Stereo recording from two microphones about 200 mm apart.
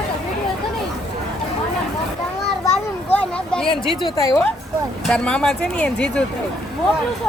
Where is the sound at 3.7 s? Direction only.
20° left (ahead or behind).